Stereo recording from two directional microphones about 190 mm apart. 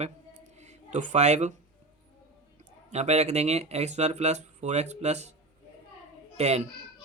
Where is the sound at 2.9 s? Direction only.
35° right (ahead or behind).